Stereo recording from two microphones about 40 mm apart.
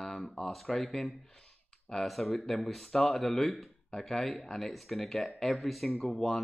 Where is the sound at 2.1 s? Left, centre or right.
Centre.